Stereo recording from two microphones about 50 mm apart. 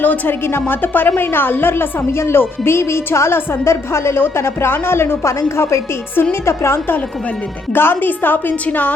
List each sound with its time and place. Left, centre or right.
0.0 s a woman's voice: left
0.4 s a woman's voice: left
2.1 s a woman's voice: left
2.4 s a woman's voice: left
5.4 s a woman's voice: left
7.7 s a woman's voice: left